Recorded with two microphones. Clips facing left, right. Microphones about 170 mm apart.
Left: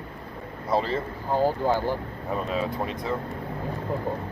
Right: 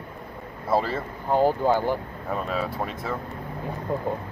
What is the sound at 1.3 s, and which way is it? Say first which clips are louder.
Speech: right 3 dB; 15° right (ahead or behind).